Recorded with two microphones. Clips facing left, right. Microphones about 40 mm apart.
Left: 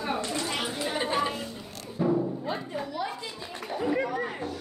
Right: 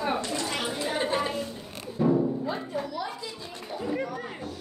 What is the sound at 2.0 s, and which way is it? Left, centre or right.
Timpani, centre.